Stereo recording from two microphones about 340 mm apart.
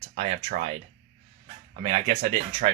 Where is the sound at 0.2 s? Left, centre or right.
Centre.